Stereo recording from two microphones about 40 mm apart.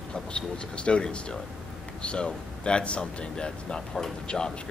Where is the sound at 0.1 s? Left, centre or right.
Left.